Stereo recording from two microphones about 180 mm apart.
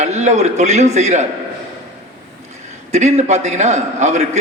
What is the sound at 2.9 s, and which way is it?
A man's voice, 40° right (ahead or behind).